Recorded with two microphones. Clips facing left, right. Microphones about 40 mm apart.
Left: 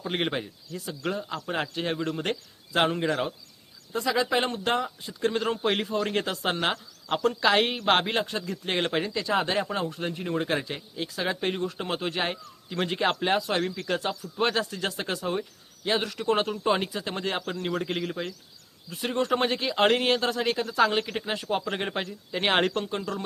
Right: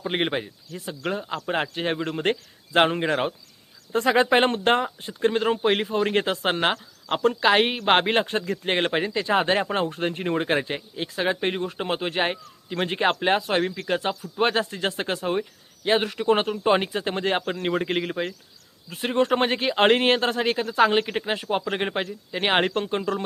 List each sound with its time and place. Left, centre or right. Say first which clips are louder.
0.0 s speech: right 3 dB; centre
3.9 s speech: right 6 dB; right; by 22.8 s centre
22.8 s speech: right 5 dB; right